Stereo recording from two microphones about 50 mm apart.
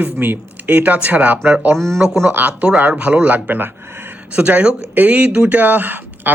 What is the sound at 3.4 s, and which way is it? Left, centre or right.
Speech, right.